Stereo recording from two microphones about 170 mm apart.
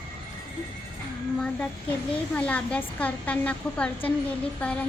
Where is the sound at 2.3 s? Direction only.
10° left (ahead or behind).